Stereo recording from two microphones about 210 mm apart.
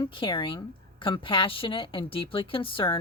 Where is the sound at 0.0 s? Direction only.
25° left (ahead or behind).